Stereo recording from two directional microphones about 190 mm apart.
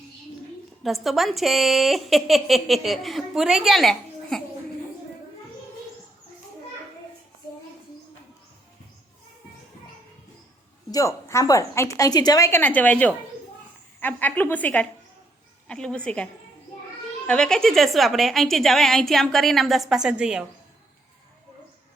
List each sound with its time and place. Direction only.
0.8 s a woman's voice: centre (ahead or behind)
10.9 s a woman's voice: 15° left (ahead or behind); by 20.4 s 5° right (ahead or behind)